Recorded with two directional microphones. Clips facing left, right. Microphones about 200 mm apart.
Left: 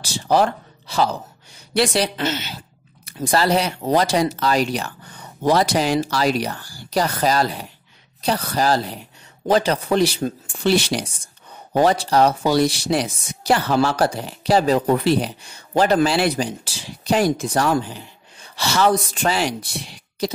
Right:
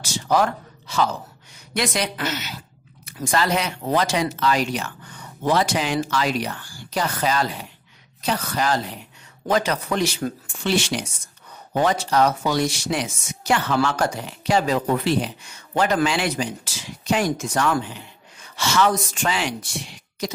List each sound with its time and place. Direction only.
0.0 s a man's voice: 30° left (ahead or behind)